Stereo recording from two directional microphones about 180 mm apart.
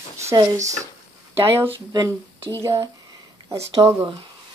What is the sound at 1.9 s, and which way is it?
Speech, 20° right (ahead or behind).